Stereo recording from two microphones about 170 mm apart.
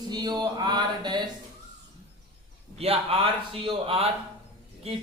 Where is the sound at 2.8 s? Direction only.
35° right (ahead or behind).